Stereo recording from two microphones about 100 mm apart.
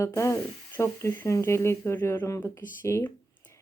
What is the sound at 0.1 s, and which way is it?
Speech, 25° left (ahead or behind).